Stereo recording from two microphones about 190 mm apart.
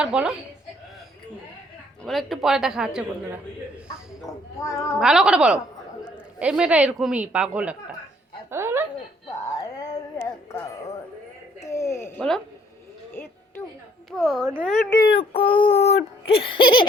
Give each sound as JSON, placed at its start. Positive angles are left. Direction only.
{"t": 0.0, "sound": "a woman's voice", "side_deg": -5}
{"t": 2.0, "sound": "a woman's voice", "side_deg": 0}
{"t": 4.6, "sound": "a woman's voice", "side_deg": 15}
{"t": 4.9, "sound": "a woman's voice", "side_deg": -5}
{"t": 8.4, "sound": "a sound", "side_deg": -15}
{"t": 9.6, "sound": "a sound", "side_deg": 15}
{"t": 14.2, "sound": "a woman's voice", "side_deg": 0}
{"t": 14.9, "sound": "child singing", "side_deg": 25}